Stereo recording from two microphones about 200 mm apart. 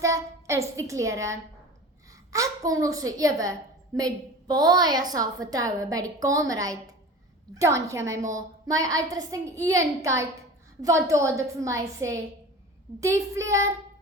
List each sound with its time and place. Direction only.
0.0 s a child's voice: 15° right (ahead or behind)